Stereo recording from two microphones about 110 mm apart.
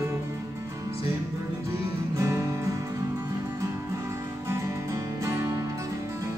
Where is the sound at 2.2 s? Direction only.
25° right (ahead or behind).